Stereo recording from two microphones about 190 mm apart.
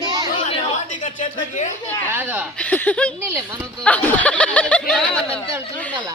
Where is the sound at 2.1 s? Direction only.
10° right (ahead or behind).